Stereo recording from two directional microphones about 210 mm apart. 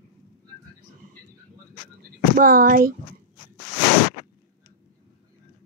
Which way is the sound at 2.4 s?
45° right (ahead or behind).